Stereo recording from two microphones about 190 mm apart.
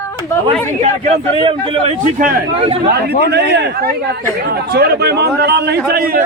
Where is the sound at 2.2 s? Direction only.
45° right (ahead or behind).